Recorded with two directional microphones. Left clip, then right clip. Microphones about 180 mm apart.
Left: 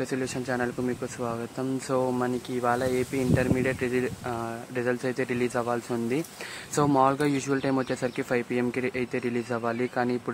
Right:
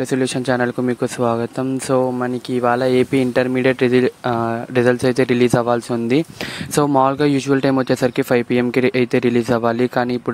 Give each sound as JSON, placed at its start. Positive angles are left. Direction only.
{"t": 0.1, "sound": "speech", "side_deg": -35}